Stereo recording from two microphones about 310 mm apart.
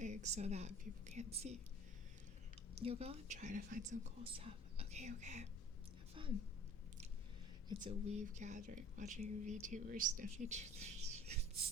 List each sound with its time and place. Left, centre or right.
0.0 s speech: right
2.7 s speech: centre
7.9 s speech: right